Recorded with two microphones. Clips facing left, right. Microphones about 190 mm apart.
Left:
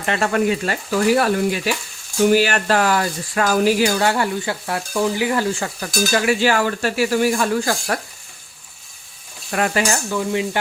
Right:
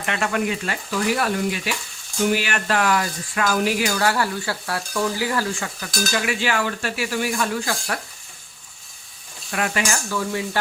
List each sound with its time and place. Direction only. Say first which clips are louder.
0.0 s speech: left 5 dB; 35° left (ahead or behind)
3.9 s stir: left 3 dB; 25° left (ahead or behind)
6.2 s speech: left 6 dB; 40° left (ahead or behind)
9.5 s speech: left 4 dB; 40° left (ahead or behind)
10.1 s stir: left 4 dB; 20° left (ahead or behind)